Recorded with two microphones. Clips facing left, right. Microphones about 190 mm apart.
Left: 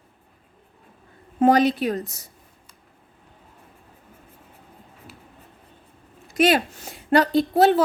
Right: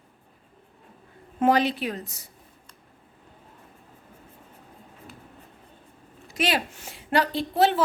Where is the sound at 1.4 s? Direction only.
45° left (ahead or behind).